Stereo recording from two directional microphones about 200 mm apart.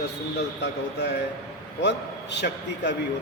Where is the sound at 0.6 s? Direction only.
60° left (ahead or behind).